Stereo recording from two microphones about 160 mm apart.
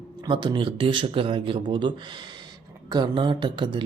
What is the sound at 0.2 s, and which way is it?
Speech, 30° right (ahead or behind).